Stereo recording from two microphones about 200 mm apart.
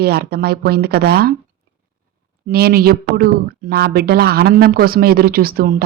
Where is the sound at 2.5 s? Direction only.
50° right (ahead or behind).